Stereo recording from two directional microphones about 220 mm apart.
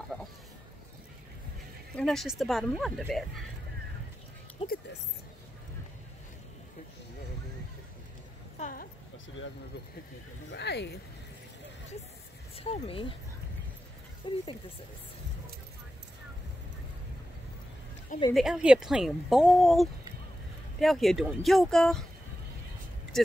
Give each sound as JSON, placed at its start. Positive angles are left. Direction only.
{"t": 2.0, "sound": "speech", "side_deg": 0}
{"t": 4.6, "sound": "a sound", "side_deg": 25}
{"t": 8.5, "sound": "a sound", "side_deg": 35}
{"t": 10.5, "sound": "speech", "side_deg": 50}
{"t": 12.5, "sound": "speech", "side_deg": 25}
{"t": 14.2, "sound": "speech", "side_deg": 20}
{"t": 18.3, "sound": "speech", "side_deg": 0}